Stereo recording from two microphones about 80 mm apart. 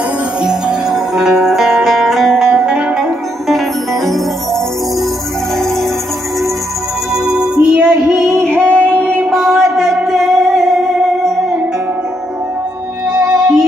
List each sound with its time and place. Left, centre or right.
0.4 s music: centre
3.4 s music: centre
7.2 s music: centre
8.6 s music: centre
9.3 s a sound: centre
9.8 s music: centre
13.2 s music: right